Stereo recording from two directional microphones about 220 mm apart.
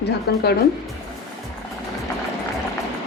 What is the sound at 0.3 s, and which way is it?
Speech, 50° left (ahead or behind).